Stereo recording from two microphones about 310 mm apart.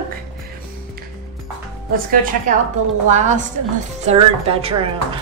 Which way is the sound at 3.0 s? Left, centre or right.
Right.